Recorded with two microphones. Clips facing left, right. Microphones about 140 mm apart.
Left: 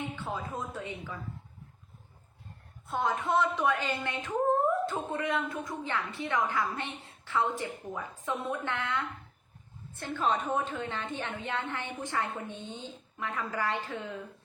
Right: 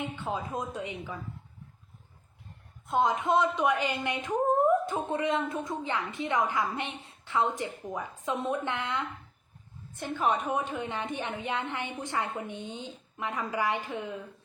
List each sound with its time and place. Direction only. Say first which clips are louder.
0.0 s a woman's voice: right 2 dB; 15° right (ahead or behind)
2.8 s a woman's voice: right 4 dB; 15° right (ahead or behind)